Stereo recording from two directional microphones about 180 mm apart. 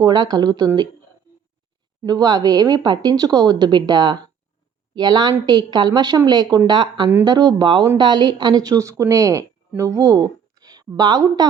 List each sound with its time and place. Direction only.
0.0 s speech: 20° right (ahead or behind)
2.0 s speech: 20° right (ahead or behind)